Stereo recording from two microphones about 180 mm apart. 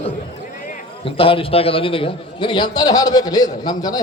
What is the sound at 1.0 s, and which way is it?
A man's voice, 30° left (ahead or behind).